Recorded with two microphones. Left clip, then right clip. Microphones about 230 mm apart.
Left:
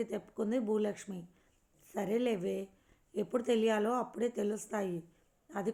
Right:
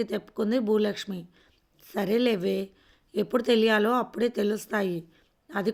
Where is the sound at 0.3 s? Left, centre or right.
Right.